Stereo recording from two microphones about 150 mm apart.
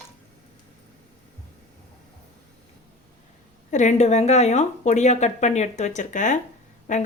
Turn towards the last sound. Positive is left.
turn(degrees=55)  # may be behind; listen again after turning